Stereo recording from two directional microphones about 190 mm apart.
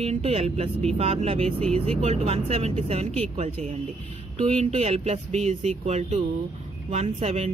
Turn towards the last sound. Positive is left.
turn(degrees=-30)  # may be behind; listen again after turning